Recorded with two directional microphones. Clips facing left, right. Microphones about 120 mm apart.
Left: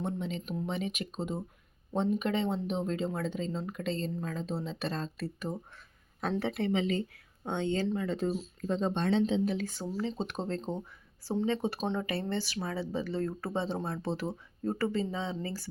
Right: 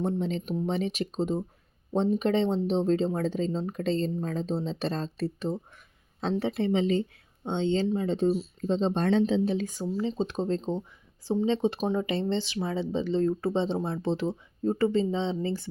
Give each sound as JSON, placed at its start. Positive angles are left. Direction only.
{"t": 0.0, "sound": "speech", "side_deg": -35}
{"t": 8.9, "sound": "speech", "side_deg": -40}
{"t": 10.0, "sound": "speech", "side_deg": -20}